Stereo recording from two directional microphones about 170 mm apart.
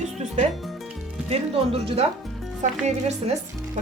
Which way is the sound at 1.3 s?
35° right (ahead or behind).